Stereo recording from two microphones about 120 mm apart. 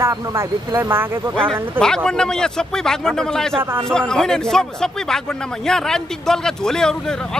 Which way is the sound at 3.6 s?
20° right (ahead or behind).